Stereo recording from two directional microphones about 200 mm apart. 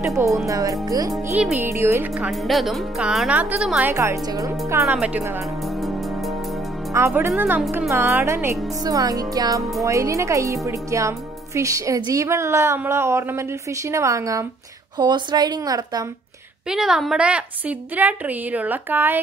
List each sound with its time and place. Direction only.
0.0 s a woman's voice: 15° right (ahead or behind)
3.9 s a woman's voice: 15° right (ahead or behind)
5.6 s music: centre (ahead or behind)
7.1 s a woman's voice: 10° right (ahead or behind)
16.6 s a woman's voice: 5° right (ahead or behind)